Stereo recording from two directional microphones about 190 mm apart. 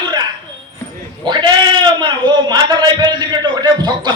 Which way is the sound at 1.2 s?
25° right (ahead or behind).